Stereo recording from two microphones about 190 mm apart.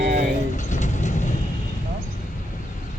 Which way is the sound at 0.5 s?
40° left (ahead or behind).